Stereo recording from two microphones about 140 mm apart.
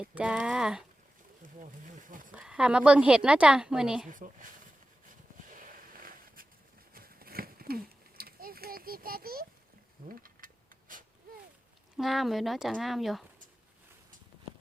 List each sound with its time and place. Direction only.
0.0 s speech: 10° right (ahead or behind)
1.4 s speech: 65° right (ahead or behind)
2.3 s a woman's voice: 5° right (ahead or behind)
4.1 s speech: 70° right (ahead or behind)
5.0 s a sound: 75° right (ahead or behind)
11.9 s speech: centre (ahead or behind)